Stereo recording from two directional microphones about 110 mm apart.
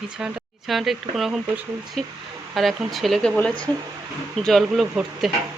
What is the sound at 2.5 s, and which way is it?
Speech, centre (ahead or behind).